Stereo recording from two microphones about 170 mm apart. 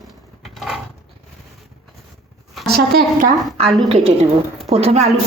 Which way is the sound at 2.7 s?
65° right (ahead or behind).